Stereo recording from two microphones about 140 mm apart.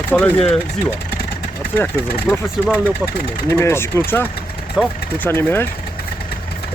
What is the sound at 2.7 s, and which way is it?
Speech, 15° right (ahead or behind).